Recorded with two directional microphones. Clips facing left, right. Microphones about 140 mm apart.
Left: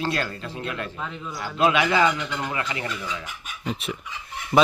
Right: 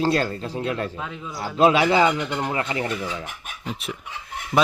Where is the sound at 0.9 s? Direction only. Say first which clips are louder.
Right 1 dB; 5° right (ahead or behind).